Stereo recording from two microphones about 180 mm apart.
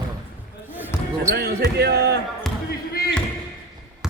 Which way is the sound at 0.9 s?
15° left (ahead or behind).